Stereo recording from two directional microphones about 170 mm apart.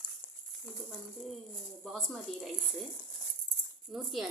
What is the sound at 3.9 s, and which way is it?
Speech, centre (ahead or behind).